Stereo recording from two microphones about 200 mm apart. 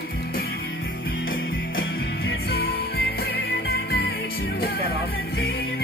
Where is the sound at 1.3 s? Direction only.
75° left (ahead or behind).